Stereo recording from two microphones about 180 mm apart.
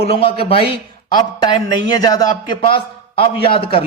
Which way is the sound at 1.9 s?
20° left (ahead or behind).